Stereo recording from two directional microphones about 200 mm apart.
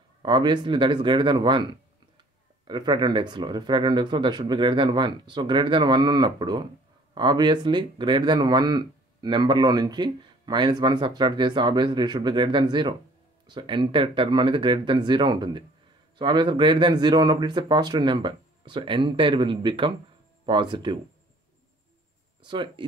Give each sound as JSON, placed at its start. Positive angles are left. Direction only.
{"t": 0.2, "sound": "speech", "side_deg": -20}
{"t": 22.4, "sound": "speech", "side_deg": -25}